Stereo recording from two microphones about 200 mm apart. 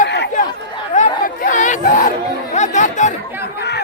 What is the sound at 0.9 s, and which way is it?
Chatter, 40° left (ahead or behind).